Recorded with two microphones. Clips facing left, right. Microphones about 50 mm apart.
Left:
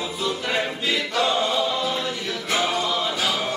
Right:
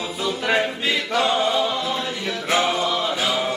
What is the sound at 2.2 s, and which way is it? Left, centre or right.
Music, right.